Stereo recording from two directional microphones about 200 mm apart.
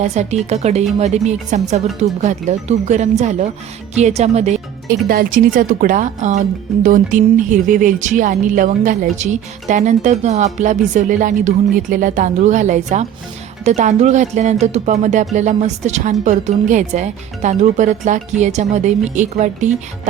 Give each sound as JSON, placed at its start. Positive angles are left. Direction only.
{"t": 0.0, "sound": "speech", "side_deg": -35}